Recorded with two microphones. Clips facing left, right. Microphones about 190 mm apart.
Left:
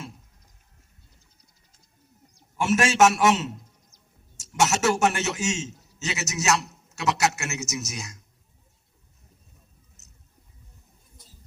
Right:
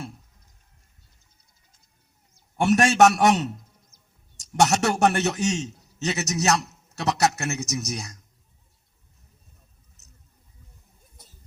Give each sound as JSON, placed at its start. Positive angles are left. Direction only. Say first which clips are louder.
{"t": 2.6, "sound": "a man's voice", "louder": "right 2 dB", "side_deg": -35}